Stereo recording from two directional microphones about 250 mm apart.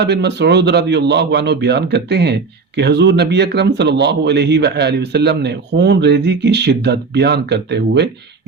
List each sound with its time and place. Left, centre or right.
0.0 s a man's voice: right